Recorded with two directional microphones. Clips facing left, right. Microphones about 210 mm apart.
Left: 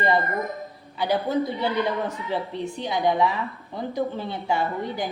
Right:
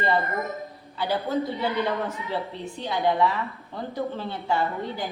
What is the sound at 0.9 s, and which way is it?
A woman's voice, 15° left (ahead or behind).